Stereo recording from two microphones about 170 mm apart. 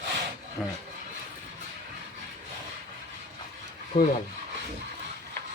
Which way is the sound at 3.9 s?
30° left (ahead or behind).